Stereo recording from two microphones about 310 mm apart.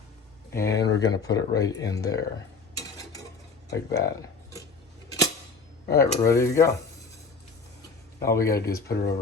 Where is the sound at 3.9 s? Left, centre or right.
Centre.